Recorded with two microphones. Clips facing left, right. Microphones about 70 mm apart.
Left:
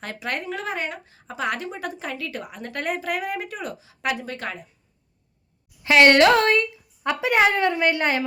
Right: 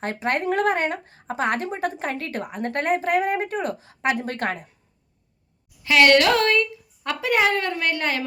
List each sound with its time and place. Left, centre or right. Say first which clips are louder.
0.0 s speech: right 6 dB; right
5.8 s speech: left 2 dB; left